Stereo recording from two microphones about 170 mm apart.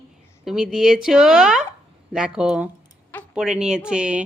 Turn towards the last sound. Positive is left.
turn(degrees=-5)  # may be behind; listen again after turning